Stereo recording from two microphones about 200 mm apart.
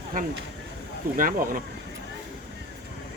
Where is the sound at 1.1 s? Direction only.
45° right (ahead or behind).